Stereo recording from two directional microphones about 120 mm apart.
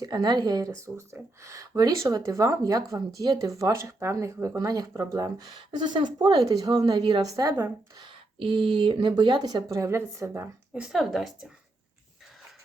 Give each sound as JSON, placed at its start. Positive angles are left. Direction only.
{"t": 0.0, "sound": "speech", "side_deg": -35}
{"t": 7.9, "sound": "speech", "side_deg": -45}
{"t": 9.7, "sound": "speech", "side_deg": -25}
{"t": 10.8, "sound": "a woman's voice", "side_deg": 0}